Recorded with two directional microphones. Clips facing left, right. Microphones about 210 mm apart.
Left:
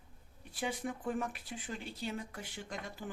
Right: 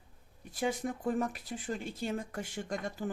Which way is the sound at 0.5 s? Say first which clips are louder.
Right 5 dB; 45° right (ahead or behind).